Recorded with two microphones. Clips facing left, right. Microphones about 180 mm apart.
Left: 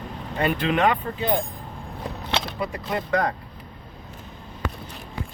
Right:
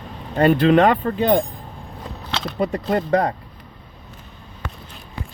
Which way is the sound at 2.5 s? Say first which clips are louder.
Right 7 dB; 45° right (ahead or behind).